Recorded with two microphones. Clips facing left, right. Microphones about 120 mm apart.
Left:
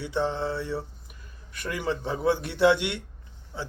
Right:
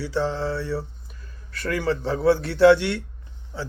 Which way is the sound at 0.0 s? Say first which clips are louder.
Right 3 dB; 20° left (ahead or behind).